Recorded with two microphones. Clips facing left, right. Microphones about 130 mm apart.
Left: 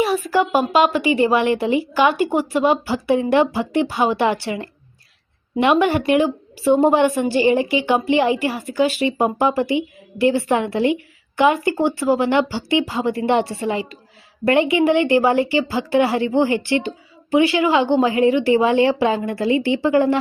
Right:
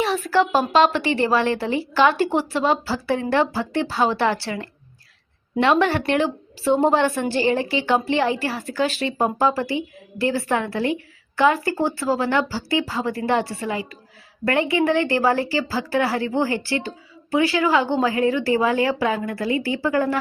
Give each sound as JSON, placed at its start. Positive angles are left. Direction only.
{"t": 0.0, "sound": "a woman's voice", "side_deg": 10}